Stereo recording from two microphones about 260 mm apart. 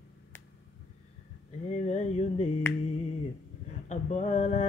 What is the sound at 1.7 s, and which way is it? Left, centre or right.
Mantra, left.